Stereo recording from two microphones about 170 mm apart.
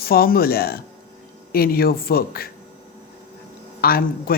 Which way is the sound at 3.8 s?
60° left (ahead or behind).